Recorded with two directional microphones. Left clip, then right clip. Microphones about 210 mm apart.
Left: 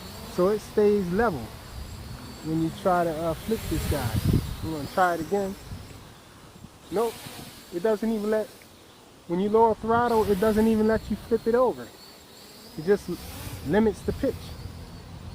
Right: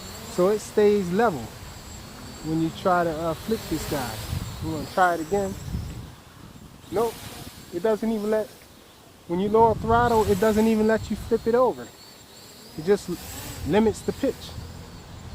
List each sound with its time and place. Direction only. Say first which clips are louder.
0.3 s speech: right 2 dB; 10° right (ahead or behind)
2.5 s speech: right 2 dB; 10° right (ahead or behind)
6.9 s speech: right 2 dB; 20° right (ahead or behind)
13.1 s snake: right 2 dB; 25° right (ahead or behind)
13.7 s speech: right 2 dB; 15° right (ahead or behind)